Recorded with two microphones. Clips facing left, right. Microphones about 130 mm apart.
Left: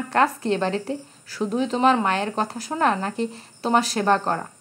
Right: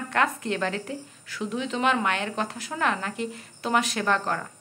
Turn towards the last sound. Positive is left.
turn(degrees=35)  # may be behind; listen again after turning